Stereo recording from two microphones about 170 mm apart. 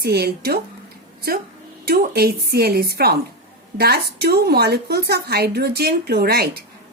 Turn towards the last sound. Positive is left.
turn(degrees=-65)  # may be behind; listen again after turning